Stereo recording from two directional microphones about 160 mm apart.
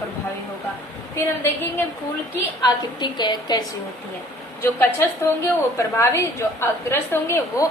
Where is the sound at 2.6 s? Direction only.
25° left (ahead or behind).